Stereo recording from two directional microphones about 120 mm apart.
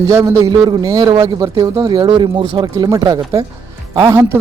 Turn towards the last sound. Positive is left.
turn(degrees=-20)  # may be behind; listen again after turning